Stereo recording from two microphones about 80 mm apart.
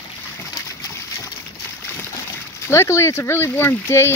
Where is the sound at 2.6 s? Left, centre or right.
Left.